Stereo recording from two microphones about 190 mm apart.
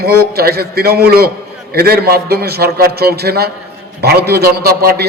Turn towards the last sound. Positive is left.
turn(degrees=-55)  # may be behind; listen again after turning